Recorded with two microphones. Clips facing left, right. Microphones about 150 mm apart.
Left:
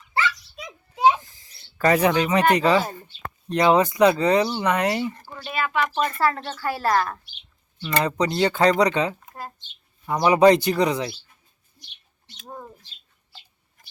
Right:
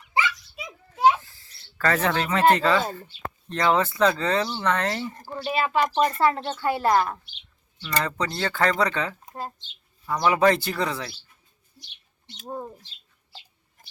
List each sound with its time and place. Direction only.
0.1 s a sound: 15° right (ahead or behind)
0.9 s a sound: 15° left (ahead or behind)
2.6 s speech: 20° left (ahead or behind)
5.5 s speech: 30° right (ahead or behind)
8.0 s speech: 15° left (ahead or behind)
12.5 s speech: 20° right (ahead or behind)